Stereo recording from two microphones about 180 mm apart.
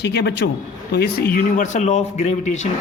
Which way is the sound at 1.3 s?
50° left (ahead or behind).